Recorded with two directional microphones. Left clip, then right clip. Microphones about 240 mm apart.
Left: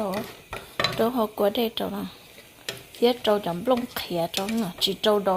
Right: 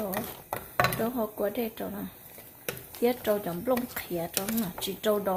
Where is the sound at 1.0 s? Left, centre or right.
Centre.